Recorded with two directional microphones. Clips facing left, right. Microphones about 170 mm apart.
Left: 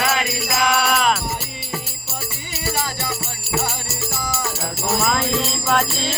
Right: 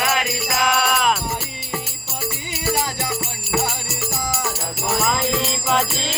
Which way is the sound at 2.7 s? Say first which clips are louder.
Right 2 dB; 15° right (ahead or behind).